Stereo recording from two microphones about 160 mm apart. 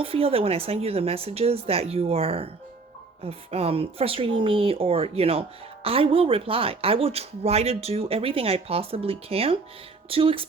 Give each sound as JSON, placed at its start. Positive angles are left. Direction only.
{"t": 0.0, "sound": "speech", "side_deg": -35}